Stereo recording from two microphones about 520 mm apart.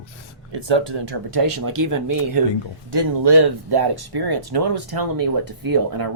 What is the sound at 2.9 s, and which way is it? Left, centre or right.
Speech, right.